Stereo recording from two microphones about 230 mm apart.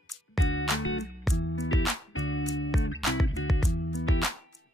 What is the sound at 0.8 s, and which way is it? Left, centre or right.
Music, left.